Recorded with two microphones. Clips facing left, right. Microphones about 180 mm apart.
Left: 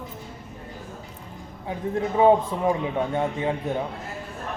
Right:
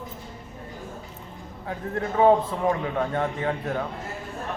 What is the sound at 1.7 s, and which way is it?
Mantra, 15° left (ahead or behind).